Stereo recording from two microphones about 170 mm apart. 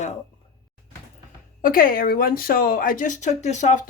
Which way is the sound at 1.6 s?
60° left (ahead or behind).